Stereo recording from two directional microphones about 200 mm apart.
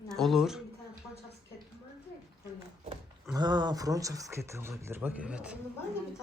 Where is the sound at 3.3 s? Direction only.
20° right (ahead or behind).